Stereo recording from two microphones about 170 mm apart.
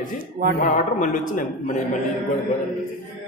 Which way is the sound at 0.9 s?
50° left (ahead or behind).